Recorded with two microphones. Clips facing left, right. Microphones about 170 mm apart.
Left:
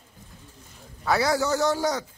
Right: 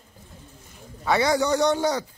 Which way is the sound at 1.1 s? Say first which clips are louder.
Right 2 dB; centre (ahead or behind).